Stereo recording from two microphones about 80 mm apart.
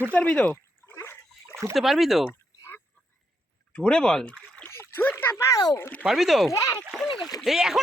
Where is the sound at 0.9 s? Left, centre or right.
Left.